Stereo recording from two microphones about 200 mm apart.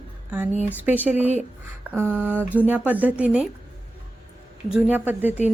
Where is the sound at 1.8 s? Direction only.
10° right (ahead or behind).